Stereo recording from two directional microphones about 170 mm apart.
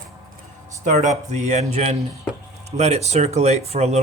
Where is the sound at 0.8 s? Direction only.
45° right (ahead or behind).